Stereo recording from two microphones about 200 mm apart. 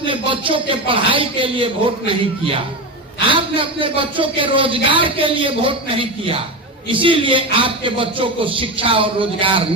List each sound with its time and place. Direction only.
0.0 s speech: 25° right (ahead or behind)